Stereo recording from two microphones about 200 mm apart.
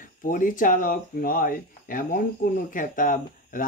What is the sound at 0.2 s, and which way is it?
Speech, 45° left (ahead or behind).